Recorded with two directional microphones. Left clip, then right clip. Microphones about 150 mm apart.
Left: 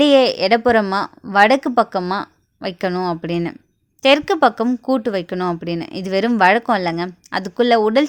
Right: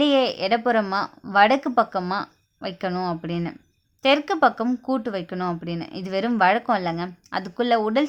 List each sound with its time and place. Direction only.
0.0 s speech: 35° left (ahead or behind)